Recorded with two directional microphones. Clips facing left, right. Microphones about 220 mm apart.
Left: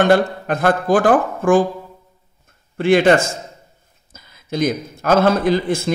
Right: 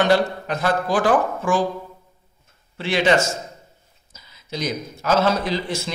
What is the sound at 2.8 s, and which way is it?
A man's voice, 50° left (ahead or behind).